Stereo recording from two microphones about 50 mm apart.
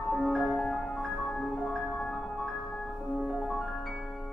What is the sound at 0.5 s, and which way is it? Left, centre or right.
Music, centre.